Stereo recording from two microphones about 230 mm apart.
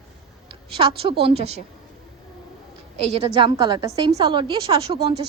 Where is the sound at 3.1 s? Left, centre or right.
Right.